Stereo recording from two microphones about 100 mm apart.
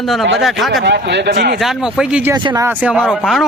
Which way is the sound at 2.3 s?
45° right (ahead or behind).